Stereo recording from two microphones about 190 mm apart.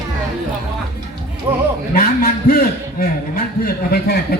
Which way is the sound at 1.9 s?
50° left (ahead or behind).